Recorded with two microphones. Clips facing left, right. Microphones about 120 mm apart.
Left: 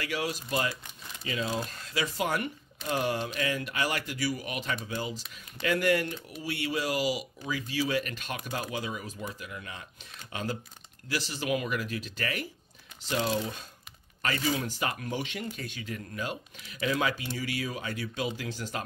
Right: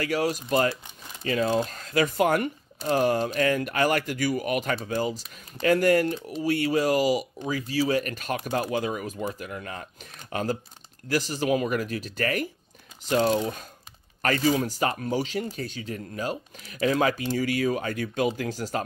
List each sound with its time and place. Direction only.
0.0 s speech: 40° right (ahead or behind)